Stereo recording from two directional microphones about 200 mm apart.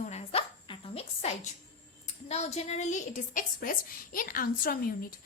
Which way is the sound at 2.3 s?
35° left (ahead or behind).